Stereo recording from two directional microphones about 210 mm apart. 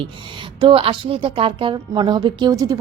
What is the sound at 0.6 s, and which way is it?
A woman's voice, 25° right (ahead or behind).